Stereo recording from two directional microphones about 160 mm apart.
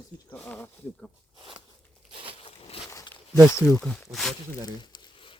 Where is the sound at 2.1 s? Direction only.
30° right (ahead or behind).